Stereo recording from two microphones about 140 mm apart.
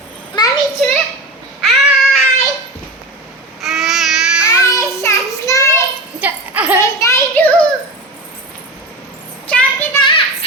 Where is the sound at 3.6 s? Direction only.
Centre (ahead or behind).